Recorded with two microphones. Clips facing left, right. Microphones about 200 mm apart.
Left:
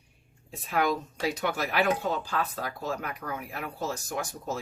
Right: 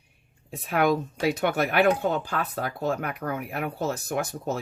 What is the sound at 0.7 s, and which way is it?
Speech, 60° right (ahead or behind).